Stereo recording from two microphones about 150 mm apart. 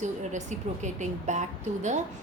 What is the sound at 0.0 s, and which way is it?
A woman's voice, 50° right (ahead or behind).